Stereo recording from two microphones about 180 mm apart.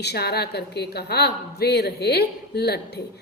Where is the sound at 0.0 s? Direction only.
60° left (ahead or behind).